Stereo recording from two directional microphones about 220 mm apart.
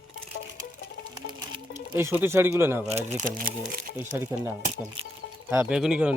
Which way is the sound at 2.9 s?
35° right (ahead or behind).